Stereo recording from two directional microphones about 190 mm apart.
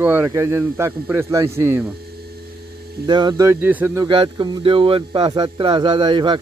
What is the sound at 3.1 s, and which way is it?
Speech, 25° right (ahead or behind).